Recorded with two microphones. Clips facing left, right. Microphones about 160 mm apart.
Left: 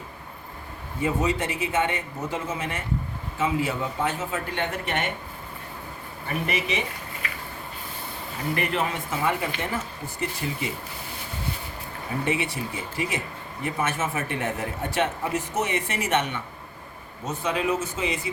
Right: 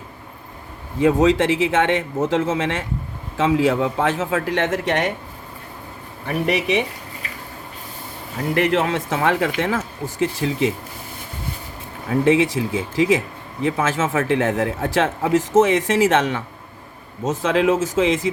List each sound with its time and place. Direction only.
0.9 s speech: 90° right
6.5 s speech: 70° right (ahead or behind)
8.5 s speech: 80° right
12.2 s speech: 90° right